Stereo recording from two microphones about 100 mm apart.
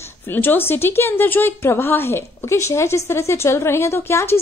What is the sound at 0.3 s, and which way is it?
A woman's voice, 20° left (ahead or behind).